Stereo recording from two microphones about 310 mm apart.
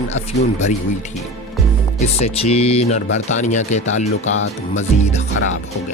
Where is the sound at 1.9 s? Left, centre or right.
Centre.